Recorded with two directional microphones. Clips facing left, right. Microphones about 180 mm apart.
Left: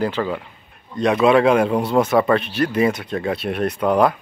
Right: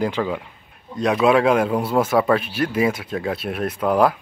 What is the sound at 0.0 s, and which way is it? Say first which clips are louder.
Speech: left 1 dB; 10° right (ahead or behind).